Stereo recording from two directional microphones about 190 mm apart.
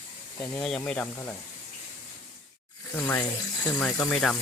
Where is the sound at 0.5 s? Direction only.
5° left (ahead or behind).